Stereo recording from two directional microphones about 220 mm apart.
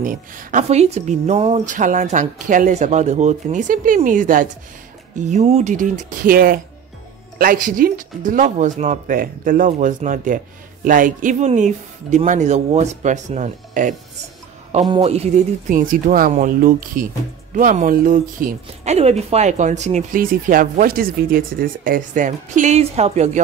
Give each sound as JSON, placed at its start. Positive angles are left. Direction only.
{"t": 0.0, "sound": "speech", "side_deg": -35}